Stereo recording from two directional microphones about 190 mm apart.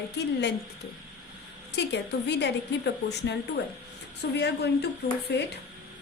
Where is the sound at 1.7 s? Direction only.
65° left (ahead or behind).